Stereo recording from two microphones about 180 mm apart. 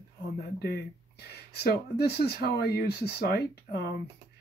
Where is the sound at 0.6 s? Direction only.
65° left (ahead or behind).